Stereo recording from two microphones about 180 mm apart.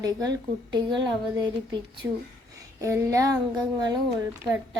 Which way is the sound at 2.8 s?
15° right (ahead or behind).